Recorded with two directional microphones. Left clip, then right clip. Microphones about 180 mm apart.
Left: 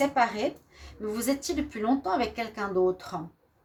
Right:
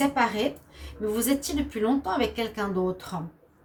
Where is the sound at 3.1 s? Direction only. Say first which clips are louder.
Even; 45° left (ahead or behind).